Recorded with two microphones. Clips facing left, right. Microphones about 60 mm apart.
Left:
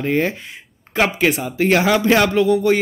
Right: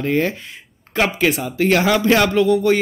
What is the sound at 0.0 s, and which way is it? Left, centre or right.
Speech, centre.